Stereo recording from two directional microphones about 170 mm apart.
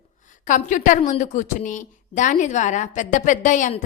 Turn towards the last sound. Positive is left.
turn(degrees=45)  # may be behind; listen again after turning